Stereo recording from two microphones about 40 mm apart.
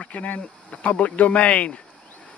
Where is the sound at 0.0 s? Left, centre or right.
Left.